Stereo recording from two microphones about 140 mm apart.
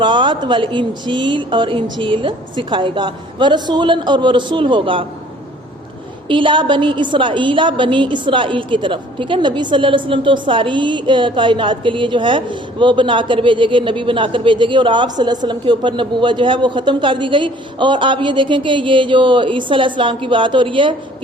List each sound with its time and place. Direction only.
0.0 s a woman's voice: 35° right (ahead or behind)
6.2 s a woman's voice: 35° right (ahead or behind)